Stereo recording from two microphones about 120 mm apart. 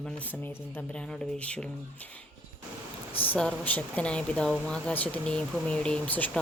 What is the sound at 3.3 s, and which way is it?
Speech, 10° left (ahead or behind).